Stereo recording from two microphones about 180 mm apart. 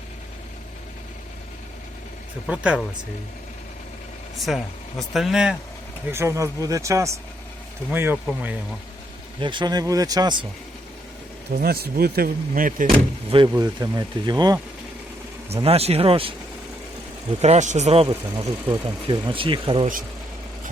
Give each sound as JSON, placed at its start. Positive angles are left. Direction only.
{"t": 2.5, "sound": "speech", "side_deg": -5}
{"t": 4.4, "sound": "speech", "side_deg": 0}
{"t": 6.1, "sound": "speech", "side_deg": -15}
{"t": 9.4, "sound": "speech", "side_deg": -25}
{"t": 11.5, "sound": "speech", "side_deg": -60}
{"t": 13.6, "sound": "speech", "side_deg": -20}
{"t": 15.6, "sound": "speech", "side_deg": -35}
{"t": 17.4, "sound": "speech", "side_deg": -40}
{"t": 18.1, "sound": "speech", "side_deg": -15}
{"t": 19.0, "sound": "speech", "side_deg": -30}